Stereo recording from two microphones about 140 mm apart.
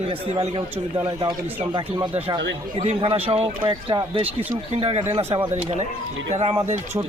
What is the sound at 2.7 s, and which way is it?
Speech, 40° right (ahead or behind).